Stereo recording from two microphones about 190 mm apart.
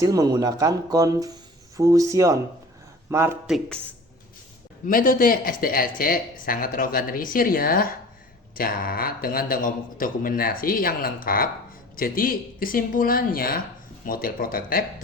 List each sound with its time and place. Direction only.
0.0 s speech: 20° right (ahead or behind)
3.4 s speech: centre (ahead or behind)
4.9 s speech: 50° left (ahead or behind)